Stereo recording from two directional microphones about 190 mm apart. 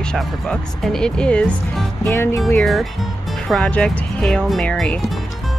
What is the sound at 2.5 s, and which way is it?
Speech, centre (ahead or behind).